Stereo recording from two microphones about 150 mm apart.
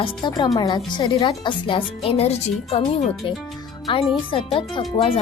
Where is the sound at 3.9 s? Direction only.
35° left (ahead or behind).